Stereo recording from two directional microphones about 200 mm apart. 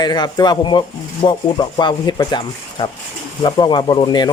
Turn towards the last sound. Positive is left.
turn(degrees=20)  # may be behind; listen again after turning